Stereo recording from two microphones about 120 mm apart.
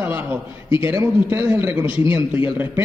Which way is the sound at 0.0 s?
15° right (ahead or behind).